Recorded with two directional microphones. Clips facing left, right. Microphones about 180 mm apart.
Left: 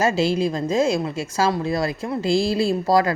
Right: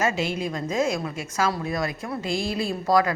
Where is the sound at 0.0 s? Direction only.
30° left (ahead or behind).